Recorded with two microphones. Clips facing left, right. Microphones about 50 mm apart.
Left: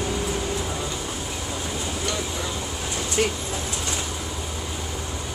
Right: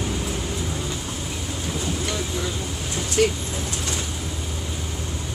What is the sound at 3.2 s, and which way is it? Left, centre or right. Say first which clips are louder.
Speech: right 4 dB; left.